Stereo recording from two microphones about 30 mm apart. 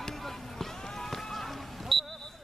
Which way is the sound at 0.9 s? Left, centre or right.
Centre.